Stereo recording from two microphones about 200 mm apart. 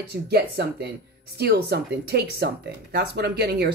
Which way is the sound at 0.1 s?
55° right (ahead or behind).